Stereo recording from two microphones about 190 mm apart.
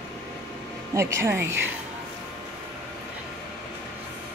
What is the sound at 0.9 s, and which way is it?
Speech, 15° right (ahead or behind).